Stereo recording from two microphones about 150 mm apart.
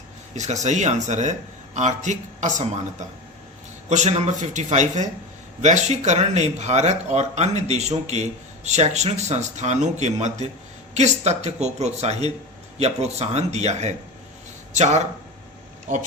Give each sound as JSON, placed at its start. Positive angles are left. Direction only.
{"t": 0.6, "sound": "speech", "side_deg": -50}
{"t": 3.8, "sound": "speech", "side_deg": -50}